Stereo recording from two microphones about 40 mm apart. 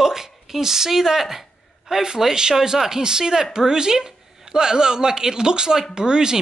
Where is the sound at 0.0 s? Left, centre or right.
Centre.